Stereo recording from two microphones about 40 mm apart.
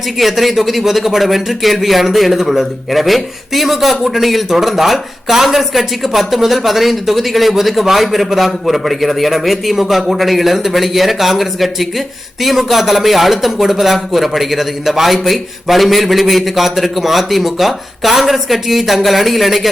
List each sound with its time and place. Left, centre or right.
0.2 s speech: centre